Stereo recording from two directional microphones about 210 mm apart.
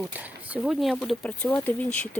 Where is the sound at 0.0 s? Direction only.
5° right (ahead or behind).